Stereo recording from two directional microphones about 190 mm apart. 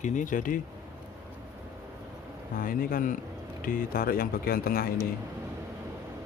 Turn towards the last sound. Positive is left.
turn(degrees=50)  # may be behind; listen again after turning